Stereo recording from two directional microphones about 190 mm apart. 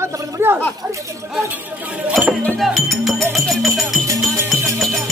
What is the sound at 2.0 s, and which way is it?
A man's voice, 5° right (ahead or behind).